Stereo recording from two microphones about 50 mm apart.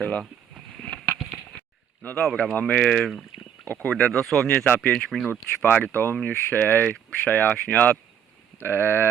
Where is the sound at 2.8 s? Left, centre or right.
Centre.